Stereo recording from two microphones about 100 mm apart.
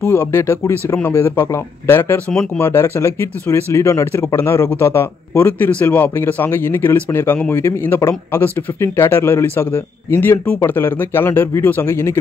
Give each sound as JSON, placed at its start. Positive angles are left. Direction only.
{"t": 0.1, "sound": "speech", "side_deg": 25}